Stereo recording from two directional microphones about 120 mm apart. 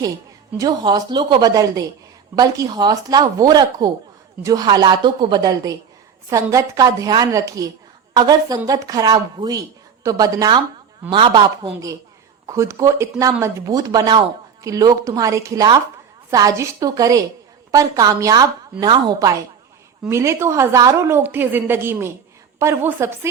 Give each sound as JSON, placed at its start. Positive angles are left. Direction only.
{"t": 0.6, "sound": "a woman's voice", "side_deg": -35}
{"t": 11.1, "sound": "speech", "side_deg": -45}
{"t": 12.5, "sound": "a woman's voice", "side_deg": -25}
{"t": 20.1, "sound": "a woman's voice", "side_deg": -20}